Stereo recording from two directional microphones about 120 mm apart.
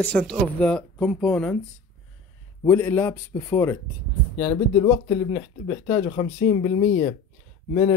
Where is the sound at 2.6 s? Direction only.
20° left (ahead or behind).